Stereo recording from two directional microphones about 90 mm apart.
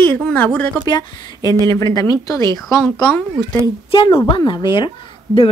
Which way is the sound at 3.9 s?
70° left (ahead or behind).